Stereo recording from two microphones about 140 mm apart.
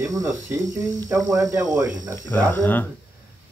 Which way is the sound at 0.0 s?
25° right (ahead or behind).